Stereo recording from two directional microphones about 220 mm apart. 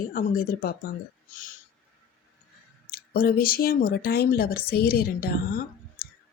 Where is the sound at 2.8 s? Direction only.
40° left (ahead or behind).